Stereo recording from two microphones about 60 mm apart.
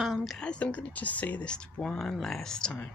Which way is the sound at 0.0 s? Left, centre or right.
Centre.